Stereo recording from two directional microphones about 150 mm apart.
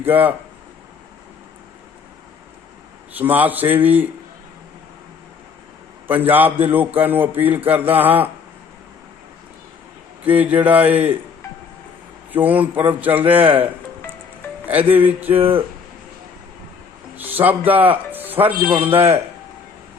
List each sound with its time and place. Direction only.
0.0 s speech: 10° right (ahead or behind)
3.2 s speech: 10° right (ahead or behind)
6.1 s speech: 10° right (ahead or behind)
10.2 s speech: 10° right (ahead or behind)
12.3 s speech: 10° right (ahead or behind)
14.7 s speech: 10° right (ahead or behind)
17.2 s speech: 10° right (ahead or behind)
18.7 s a man's voice: 40° right (ahead or behind)